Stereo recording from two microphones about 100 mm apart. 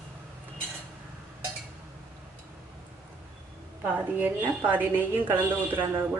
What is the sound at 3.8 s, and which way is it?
A woman's voice, 15° right (ahead or behind).